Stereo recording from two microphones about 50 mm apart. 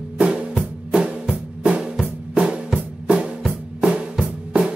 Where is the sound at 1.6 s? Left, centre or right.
Right.